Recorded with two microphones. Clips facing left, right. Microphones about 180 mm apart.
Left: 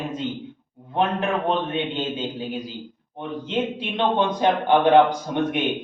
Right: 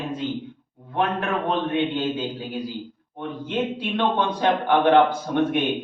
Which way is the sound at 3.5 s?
20° left (ahead or behind).